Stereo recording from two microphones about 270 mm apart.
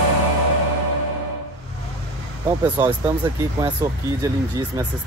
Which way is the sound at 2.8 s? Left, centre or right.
Centre.